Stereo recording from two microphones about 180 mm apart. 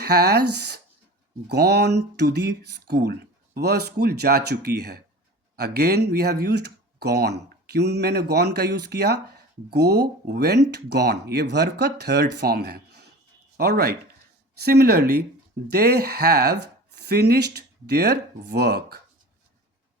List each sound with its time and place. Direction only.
0.0 s speech: 65° right (ahead or behind)